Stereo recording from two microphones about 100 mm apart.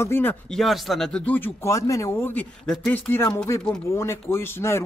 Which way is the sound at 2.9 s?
20° left (ahead or behind).